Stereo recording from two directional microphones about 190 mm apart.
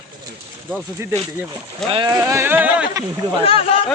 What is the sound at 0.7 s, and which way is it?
Speech, 10° right (ahead or behind).